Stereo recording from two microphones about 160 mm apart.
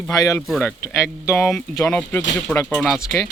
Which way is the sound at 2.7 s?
Centre (ahead or behind).